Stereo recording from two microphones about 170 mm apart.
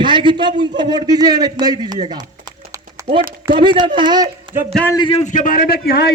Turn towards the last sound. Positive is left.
turn(degrees=65)  # may be behind; listen again after turning